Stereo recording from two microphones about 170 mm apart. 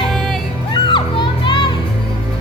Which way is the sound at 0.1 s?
Centre (ahead or behind).